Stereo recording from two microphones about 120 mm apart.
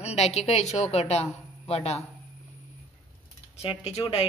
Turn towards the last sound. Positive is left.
turn(degrees=55)  # may be behind; listen again after turning